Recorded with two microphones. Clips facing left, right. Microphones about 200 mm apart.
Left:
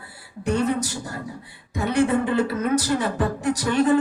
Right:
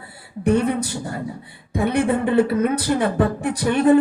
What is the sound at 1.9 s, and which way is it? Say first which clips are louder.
A woman's voice: right 2 dB; 55° right (ahead or behind).